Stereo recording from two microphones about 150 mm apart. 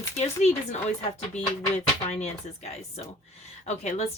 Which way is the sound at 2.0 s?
45° left (ahead or behind).